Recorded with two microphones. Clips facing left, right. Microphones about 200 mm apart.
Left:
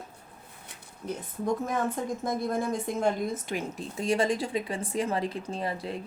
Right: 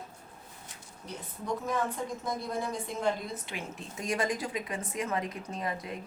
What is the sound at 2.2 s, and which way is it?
A woman's voice, 50° left (ahead or behind).